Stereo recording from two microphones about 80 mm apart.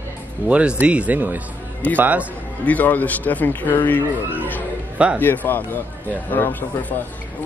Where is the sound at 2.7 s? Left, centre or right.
Left.